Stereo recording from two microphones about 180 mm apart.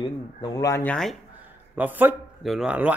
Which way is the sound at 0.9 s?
Centre (ahead or behind).